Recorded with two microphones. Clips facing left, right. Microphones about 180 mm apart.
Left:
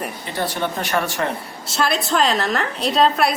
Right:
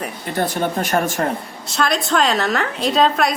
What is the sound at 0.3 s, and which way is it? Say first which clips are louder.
Speech: right 3 dB; 50° right (ahead or behind).